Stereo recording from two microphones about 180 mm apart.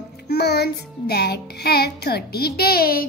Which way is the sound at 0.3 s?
65° left (ahead or behind).